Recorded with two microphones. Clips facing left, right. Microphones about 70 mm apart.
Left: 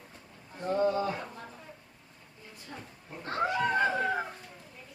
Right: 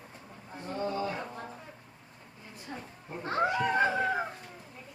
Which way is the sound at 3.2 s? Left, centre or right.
Centre.